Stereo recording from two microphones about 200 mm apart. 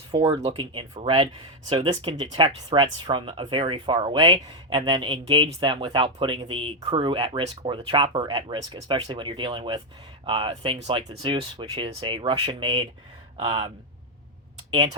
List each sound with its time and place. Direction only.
0.1 s speech: 30° right (ahead or behind)